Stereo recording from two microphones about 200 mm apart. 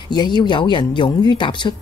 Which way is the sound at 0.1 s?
20° left (ahead or behind).